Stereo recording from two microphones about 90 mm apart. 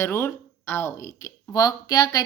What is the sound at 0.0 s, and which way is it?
Speech, 25° left (ahead or behind).